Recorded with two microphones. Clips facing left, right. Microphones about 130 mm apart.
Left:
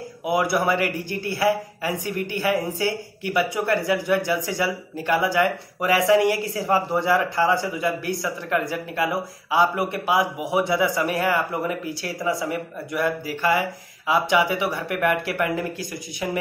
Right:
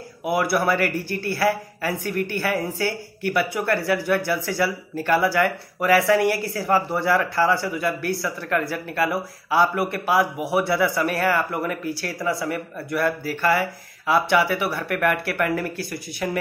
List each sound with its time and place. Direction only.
0.2 s speech: 20° left (ahead or behind)